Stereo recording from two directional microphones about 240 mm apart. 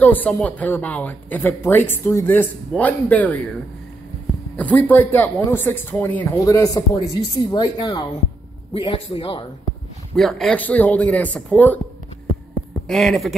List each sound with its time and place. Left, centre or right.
0.0 s speech: centre
4.6 s a man's voice: centre
10.1 s speech: centre
12.8 s speech: centre